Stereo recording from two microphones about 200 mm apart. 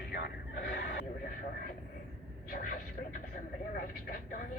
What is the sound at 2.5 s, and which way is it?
Speech, 45° left (ahead or behind).